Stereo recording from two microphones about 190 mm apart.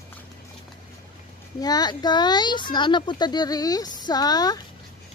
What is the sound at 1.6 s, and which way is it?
A child's voice, 20° left (ahead or behind).